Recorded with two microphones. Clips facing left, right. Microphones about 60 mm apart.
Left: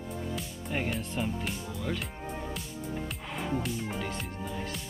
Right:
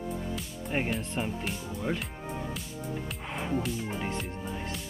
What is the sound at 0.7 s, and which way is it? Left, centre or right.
Speech, right.